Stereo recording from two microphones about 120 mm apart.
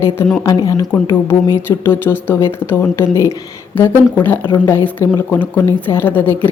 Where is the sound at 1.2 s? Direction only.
20° left (ahead or behind).